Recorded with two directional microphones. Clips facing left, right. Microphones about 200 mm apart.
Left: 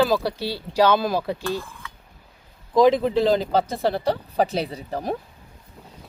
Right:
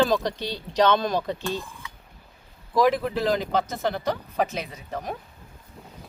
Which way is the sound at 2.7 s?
20° left (ahead or behind).